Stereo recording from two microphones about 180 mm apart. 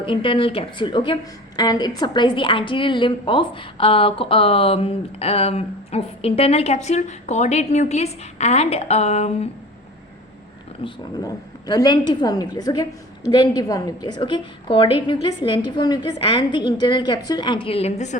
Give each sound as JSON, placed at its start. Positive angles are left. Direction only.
{"t": 0.0, "sound": "a woman's voice", "side_deg": 30}
{"t": 10.8, "sound": "a woman's voice", "side_deg": 20}